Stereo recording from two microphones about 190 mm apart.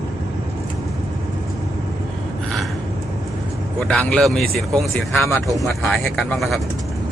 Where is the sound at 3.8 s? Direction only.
5° left (ahead or behind).